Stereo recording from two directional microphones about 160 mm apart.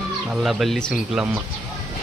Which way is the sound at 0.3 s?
Centre (ahead or behind).